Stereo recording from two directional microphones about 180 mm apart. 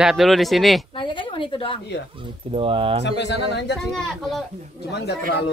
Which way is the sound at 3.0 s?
75° left (ahead or behind).